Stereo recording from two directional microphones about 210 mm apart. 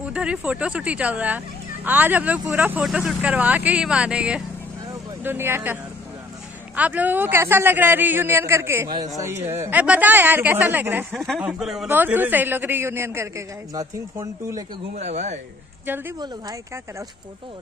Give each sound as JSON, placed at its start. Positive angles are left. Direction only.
{"t": 0.1, "sound": "a man's voice", "side_deg": -5}
{"t": 15.0, "sound": "speech", "side_deg": -30}
{"t": 15.9, "sound": "a woman's voice", "side_deg": -20}